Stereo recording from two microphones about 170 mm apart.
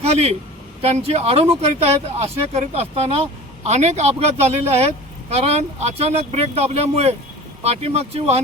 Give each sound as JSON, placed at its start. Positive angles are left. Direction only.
{"t": 0.0, "sound": "a man's voice", "side_deg": -40}